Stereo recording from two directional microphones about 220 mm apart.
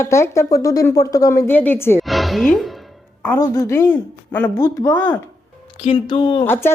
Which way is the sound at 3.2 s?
15° left (ahead or behind).